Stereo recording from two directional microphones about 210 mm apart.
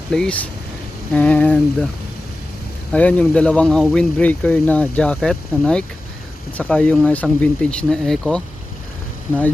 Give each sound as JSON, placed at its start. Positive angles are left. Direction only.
{"t": 0.1, "sound": "speech", "side_deg": 5}
{"t": 2.9, "sound": "speech", "side_deg": 5}